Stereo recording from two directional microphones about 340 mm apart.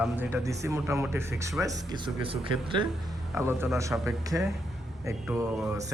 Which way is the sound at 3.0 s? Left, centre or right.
Centre.